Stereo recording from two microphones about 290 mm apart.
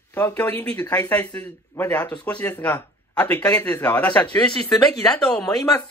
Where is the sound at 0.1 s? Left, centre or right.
Centre.